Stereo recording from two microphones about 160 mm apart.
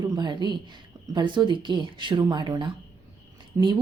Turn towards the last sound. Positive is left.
turn(degrees=-15)  # may be behind; listen again after turning